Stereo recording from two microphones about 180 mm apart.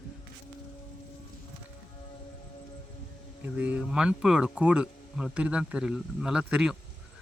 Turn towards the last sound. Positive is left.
turn(degrees=-5)  # may be behind; listen again after turning